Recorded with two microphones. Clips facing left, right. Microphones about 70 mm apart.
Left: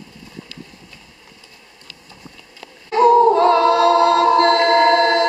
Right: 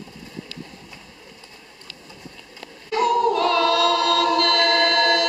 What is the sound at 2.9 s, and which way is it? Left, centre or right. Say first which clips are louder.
A capella: left 8 dB; left.